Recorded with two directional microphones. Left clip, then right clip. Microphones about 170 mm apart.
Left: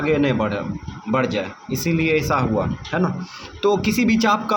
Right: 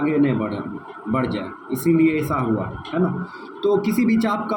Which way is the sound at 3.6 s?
45° left (ahead or behind).